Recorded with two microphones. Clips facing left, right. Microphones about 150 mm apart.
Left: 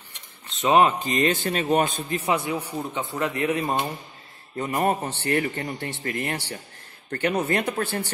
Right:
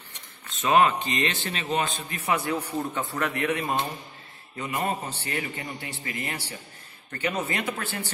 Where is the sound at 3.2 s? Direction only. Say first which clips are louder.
Left 3 dB; 25° left (ahead or behind).